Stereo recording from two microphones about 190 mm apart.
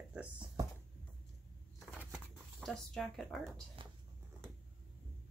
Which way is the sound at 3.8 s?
25° right (ahead or behind).